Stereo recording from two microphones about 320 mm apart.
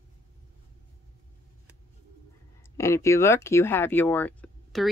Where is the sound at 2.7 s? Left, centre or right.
Centre.